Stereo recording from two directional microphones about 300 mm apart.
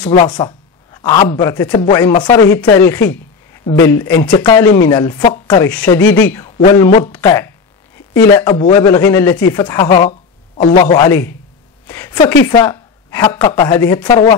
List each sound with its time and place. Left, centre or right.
0.0 s speech: centre
6.6 s a man's voice: centre